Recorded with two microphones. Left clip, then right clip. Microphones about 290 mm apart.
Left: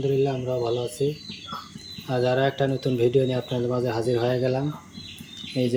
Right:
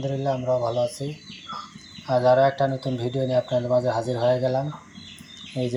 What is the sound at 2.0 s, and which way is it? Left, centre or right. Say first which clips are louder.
Speech: right 5 dB; centre.